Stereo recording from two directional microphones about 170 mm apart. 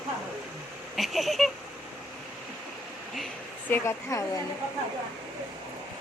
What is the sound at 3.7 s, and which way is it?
Speech, 15° left (ahead or behind).